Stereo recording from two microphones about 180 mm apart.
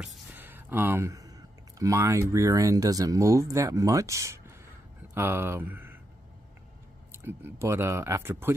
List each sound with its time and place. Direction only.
0.0 s a sound: 10° right (ahead or behind)
1.8 s speech: 15° right (ahead or behind)
7.2 s speech: 15° right (ahead or behind)